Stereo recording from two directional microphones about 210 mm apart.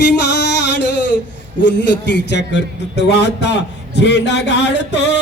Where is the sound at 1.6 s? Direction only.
55° left (ahead or behind).